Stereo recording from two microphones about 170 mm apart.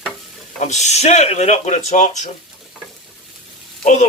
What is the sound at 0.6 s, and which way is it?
Speech, 45° left (ahead or behind).